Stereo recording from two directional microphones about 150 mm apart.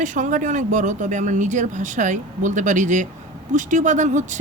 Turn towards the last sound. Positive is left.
turn(degrees=-55)  # may be behind; listen again after turning